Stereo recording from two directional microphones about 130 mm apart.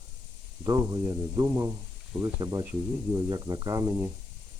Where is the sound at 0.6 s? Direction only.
30° right (ahead or behind).